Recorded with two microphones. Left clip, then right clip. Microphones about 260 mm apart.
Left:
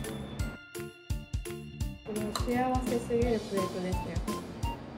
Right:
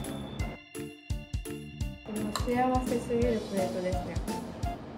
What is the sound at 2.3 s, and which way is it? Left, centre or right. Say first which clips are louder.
Music: right 3 dB; centre.